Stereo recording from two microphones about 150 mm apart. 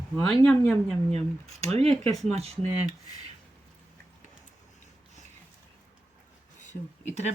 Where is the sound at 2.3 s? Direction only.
45° right (ahead or behind).